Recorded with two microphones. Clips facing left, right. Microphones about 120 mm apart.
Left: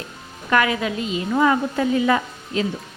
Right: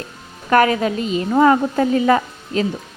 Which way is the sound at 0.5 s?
40° right (ahead or behind).